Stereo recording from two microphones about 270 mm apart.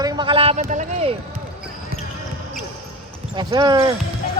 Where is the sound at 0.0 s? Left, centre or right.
Centre.